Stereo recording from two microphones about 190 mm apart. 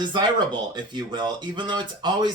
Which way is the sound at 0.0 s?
25° right (ahead or behind).